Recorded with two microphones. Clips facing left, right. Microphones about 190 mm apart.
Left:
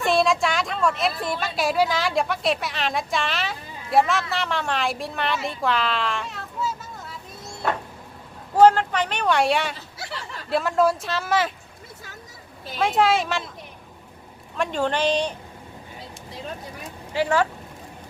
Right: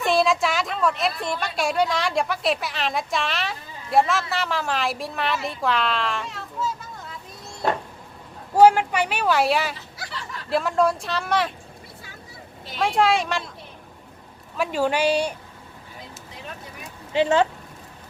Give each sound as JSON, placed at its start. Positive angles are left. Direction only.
{"t": 0.0, "sound": "a woman's voice", "side_deg": 0}
{"t": 8.5, "sound": "speech", "side_deg": -10}
{"t": 12.7, "sound": "speech", "side_deg": 0}
{"t": 14.5, "sound": "speech", "side_deg": -5}
{"t": 17.1, "sound": "speech", "side_deg": -20}